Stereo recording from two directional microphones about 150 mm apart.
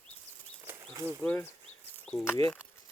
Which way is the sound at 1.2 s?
10° left (ahead or behind).